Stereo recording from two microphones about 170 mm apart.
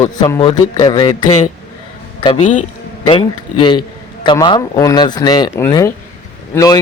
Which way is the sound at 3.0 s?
30° left (ahead or behind).